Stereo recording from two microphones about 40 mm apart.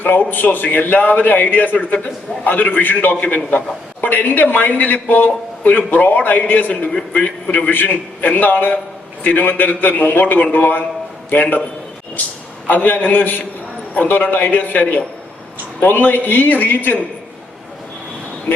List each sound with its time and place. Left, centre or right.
0.2 s a man's voice: left
12.6 s a man's voice: left